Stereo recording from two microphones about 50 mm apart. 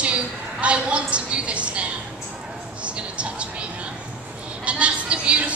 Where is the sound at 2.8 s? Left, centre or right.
Right.